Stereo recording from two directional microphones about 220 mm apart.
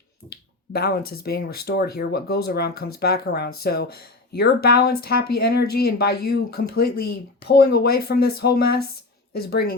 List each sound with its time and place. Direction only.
0.3 s speech: 45° left (ahead or behind)